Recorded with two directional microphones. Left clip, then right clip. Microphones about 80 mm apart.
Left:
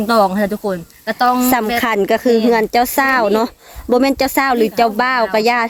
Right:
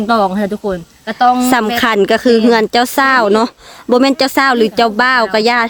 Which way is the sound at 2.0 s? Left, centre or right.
Right.